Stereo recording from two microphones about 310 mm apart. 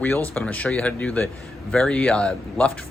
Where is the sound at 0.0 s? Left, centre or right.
Centre.